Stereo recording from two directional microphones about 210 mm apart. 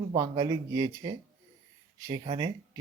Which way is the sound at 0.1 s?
20° right (ahead or behind).